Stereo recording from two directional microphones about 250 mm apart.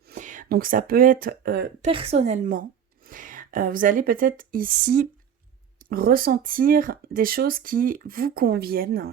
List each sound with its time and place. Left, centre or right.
0.0 s speech: right
1.9 s a woman's voice: right